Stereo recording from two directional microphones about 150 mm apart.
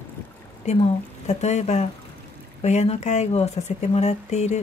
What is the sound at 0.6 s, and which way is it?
Speech, 50° left (ahead or behind).